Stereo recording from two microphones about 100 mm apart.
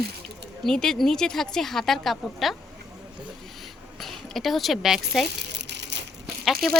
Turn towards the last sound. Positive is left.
turn(degrees=5)  # may be behind; listen again after turning